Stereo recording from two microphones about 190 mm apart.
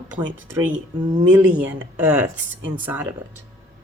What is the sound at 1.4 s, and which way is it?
Speech, 5° right (ahead or behind).